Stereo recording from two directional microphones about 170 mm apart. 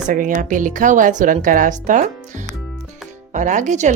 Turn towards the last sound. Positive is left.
turn(degrees=-45)  # may be behind; listen again after turning